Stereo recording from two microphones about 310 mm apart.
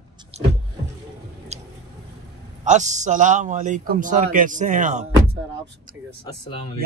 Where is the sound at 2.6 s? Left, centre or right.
Right.